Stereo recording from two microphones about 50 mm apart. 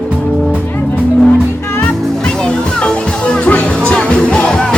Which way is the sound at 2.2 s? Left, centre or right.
Centre.